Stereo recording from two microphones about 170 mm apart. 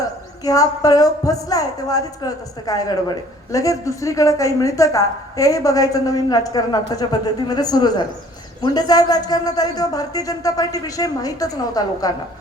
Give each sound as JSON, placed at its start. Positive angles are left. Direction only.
{"t": 0.0, "sound": "a woman's voice", "side_deg": 20}